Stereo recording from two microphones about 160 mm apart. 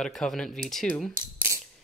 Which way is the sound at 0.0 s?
Centre (ahead or behind).